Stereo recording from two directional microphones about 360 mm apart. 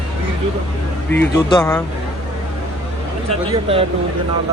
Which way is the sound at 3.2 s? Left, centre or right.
Centre.